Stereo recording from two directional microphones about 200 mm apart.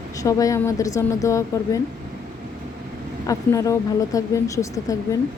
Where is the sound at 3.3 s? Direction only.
15° left (ahead or behind).